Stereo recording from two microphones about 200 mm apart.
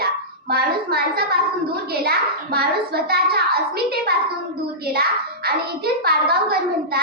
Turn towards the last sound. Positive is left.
turn(degrees=-50)  # may be behind; listen again after turning